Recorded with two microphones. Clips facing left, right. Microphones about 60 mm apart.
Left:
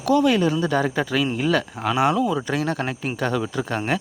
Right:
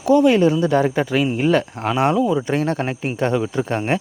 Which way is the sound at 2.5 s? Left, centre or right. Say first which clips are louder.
Right 3 dB; right.